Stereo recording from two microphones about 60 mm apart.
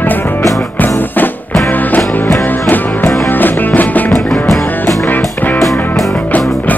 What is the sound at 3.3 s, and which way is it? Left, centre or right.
Music, left.